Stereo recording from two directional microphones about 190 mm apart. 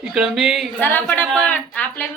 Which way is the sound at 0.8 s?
10° left (ahead or behind).